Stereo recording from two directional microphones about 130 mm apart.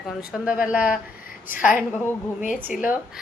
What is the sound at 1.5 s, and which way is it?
Speech, 90° left.